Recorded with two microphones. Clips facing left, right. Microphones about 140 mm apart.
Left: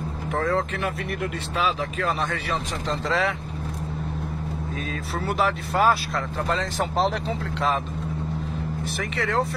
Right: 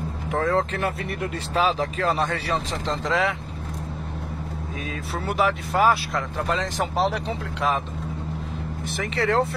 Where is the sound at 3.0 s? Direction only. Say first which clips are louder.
Right 1 dB; 20° right (ahead or behind).